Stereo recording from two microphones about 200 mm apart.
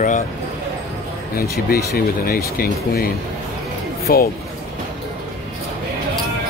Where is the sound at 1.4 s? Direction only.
50° left (ahead or behind).